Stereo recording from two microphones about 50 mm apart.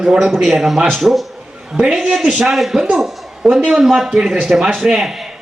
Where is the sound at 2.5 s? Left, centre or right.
Centre.